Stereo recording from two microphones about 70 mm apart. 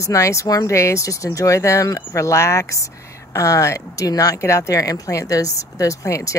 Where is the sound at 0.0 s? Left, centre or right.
Left.